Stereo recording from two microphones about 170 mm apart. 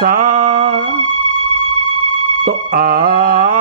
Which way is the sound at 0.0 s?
55° right (ahead or behind).